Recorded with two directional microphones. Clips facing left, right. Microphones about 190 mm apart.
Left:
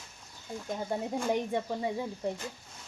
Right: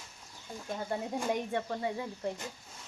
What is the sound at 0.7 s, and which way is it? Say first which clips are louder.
Speech: left 2 dB; 10° left (ahead or behind).